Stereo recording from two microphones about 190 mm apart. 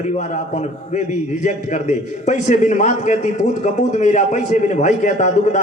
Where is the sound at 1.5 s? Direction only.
40° left (ahead or behind).